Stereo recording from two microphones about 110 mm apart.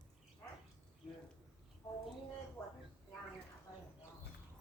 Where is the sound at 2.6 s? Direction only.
15° left (ahead or behind).